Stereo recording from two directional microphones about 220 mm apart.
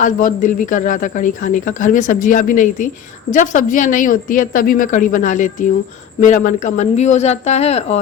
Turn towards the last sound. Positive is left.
turn(degrees=30)  # may be behind; listen again after turning